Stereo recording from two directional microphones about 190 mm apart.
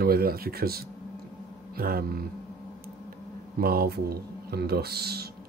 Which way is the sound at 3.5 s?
50° right (ahead or behind).